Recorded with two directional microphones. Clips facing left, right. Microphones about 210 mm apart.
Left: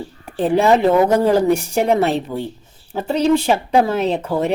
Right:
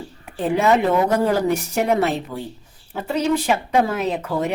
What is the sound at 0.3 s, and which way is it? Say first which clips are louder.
A woman's voice: left 3 dB; 30° left (ahead or behind).